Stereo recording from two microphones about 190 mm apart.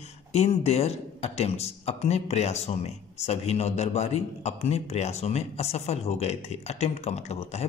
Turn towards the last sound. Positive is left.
turn(degrees=35)  # may be behind; listen again after turning